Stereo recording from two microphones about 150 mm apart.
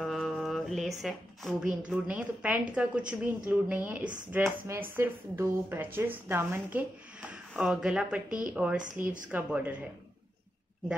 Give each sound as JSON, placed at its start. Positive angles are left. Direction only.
{"t": 0.0, "sound": "a sound", "side_deg": 0}
{"t": 1.9, "sound": "a woman's voice", "side_deg": -10}
{"t": 8.3, "sound": "a woman's voice", "side_deg": -65}
{"t": 8.5, "sound": "a woman's voice", "side_deg": -10}